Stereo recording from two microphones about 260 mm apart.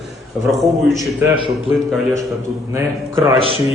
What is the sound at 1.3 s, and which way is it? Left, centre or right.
Speech, centre.